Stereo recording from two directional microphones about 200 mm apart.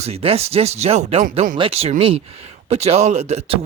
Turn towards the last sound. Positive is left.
turn(degrees=-30)  # may be behind; listen again after turning